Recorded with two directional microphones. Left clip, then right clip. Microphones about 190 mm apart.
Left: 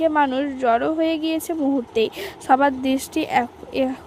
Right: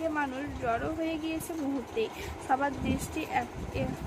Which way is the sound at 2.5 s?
50° left (ahead or behind).